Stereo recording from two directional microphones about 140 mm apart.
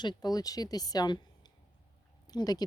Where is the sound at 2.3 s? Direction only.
30° left (ahead or behind).